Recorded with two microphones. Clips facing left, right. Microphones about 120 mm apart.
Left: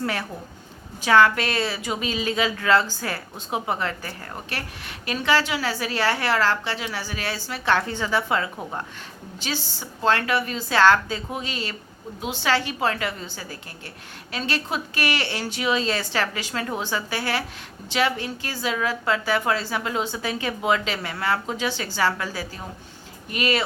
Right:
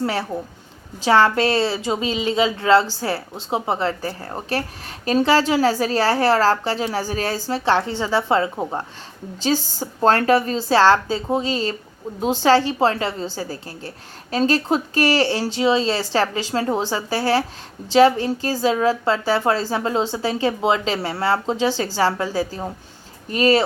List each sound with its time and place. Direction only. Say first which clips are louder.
0.0 s a woman's voice: right 5 dB; 30° right (ahead or behind)